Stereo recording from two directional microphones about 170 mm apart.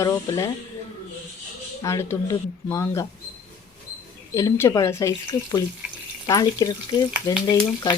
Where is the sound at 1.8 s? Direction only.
15° left (ahead or behind).